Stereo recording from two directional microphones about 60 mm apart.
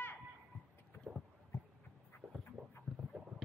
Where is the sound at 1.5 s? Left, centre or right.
Left.